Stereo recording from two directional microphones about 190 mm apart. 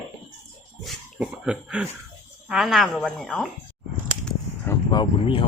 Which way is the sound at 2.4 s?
Centre (ahead or behind).